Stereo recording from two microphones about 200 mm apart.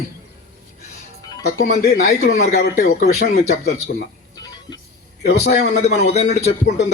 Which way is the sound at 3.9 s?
50° left (ahead or behind).